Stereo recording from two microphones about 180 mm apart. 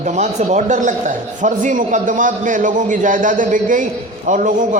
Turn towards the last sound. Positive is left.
turn(degrees=-45)  # may be behind; listen again after turning